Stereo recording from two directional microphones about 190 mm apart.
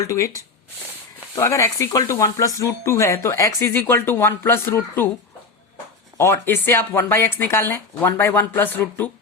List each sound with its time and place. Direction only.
0.0 s speech: 15° left (ahead or behind)
6.1 s speech: 10° left (ahead or behind)